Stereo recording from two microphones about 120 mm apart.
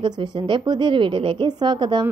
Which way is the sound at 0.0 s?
40° right (ahead or behind).